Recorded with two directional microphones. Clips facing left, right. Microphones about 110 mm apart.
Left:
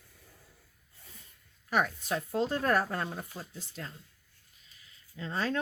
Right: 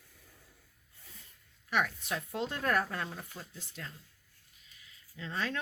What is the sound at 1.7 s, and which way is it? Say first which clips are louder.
Speech: left 3 dB; 35° left (ahead or behind).